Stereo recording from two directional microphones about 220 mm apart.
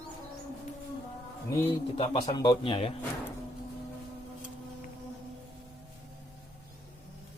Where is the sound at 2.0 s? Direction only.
25° left (ahead or behind).